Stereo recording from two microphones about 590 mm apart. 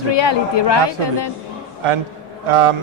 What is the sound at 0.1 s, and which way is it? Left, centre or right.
Speech, left.